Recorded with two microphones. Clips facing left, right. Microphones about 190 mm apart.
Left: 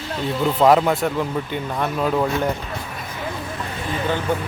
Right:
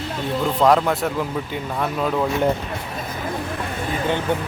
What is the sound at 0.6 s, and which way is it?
Speech, centre (ahead or behind).